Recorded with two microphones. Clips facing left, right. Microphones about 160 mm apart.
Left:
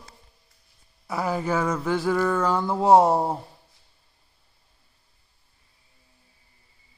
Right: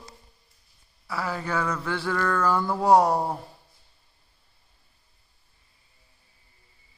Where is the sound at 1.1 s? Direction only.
20° left (ahead or behind).